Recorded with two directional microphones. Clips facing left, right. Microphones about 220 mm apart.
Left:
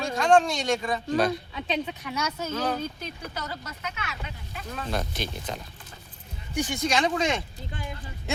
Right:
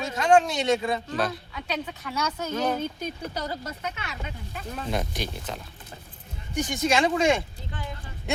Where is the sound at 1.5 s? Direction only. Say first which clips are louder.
Left 2 dB; 20° left (ahead or behind).